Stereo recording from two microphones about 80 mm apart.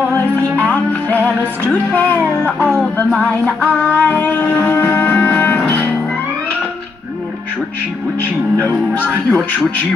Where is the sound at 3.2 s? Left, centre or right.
Left.